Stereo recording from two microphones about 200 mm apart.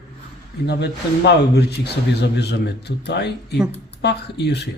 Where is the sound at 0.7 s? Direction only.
55° left (ahead or behind).